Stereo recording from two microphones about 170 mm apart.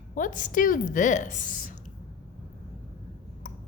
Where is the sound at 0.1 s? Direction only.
50° left (ahead or behind).